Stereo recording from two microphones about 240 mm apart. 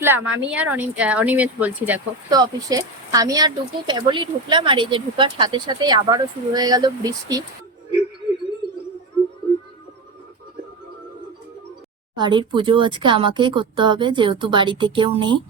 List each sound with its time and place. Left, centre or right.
0.0 s speech: centre
12.1 s speech: centre